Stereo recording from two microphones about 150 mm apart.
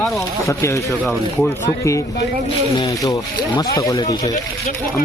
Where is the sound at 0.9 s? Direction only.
Centre (ahead or behind).